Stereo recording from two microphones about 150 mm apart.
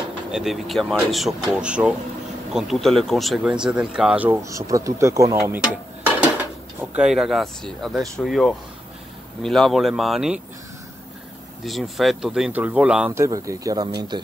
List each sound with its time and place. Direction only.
0.3 s speech: centre (ahead or behind)
4.4 s speech: 20° right (ahead or behind)
6.8 s speech: 5° right (ahead or behind)
11.6 s speech: centre (ahead or behind)
13.1 s speech: 20° right (ahead or behind)